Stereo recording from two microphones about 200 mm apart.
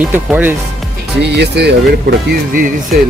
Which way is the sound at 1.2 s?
55° right (ahead or behind).